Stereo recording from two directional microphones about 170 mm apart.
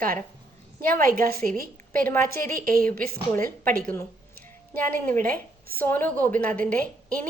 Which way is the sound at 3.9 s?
10° left (ahead or behind).